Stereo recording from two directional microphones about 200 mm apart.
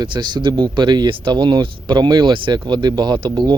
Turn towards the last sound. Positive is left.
turn(degrees=-25)  # may be behind; listen again after turning